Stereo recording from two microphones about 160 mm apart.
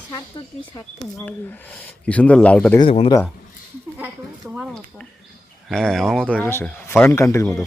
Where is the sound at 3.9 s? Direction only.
5° right (ahead or behind).